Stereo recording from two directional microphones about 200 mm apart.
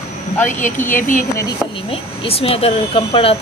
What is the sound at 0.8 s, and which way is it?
Speech, 10° left (ahead or behind).